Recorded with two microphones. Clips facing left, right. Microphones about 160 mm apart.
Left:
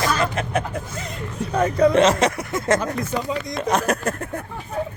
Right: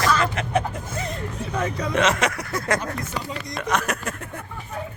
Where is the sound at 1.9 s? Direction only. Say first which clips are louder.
Left 5 dB; 30° left (ahead or behind).